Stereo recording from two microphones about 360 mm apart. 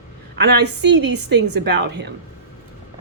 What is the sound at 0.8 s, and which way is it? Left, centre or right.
A woman's voice, right.